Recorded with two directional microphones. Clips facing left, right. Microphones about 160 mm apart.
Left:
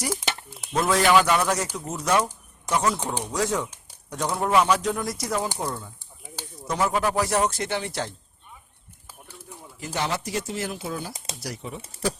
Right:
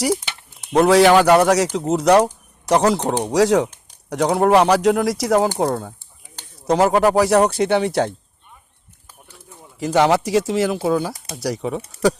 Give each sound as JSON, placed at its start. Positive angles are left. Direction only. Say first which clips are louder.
{"t": 0.7, "sound": "speech", "louder": "right 8 dB", "side_deg": -75}
{"t": 9.8, "sound": "speech", "louder": "right 13 dB", "side_deg": -85}